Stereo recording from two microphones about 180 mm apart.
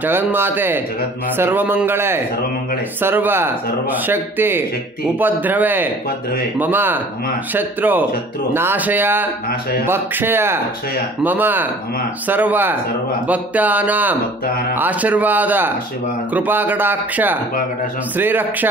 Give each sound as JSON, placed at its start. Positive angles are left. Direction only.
{"t": 0.0, "sound": "a man's voice", "side_deg": -10}
{"t": 9.5, "sound": "speech", "side_deg": 55}
{"t": 9.8, "sound": "a man's voice", "side_deg": -10}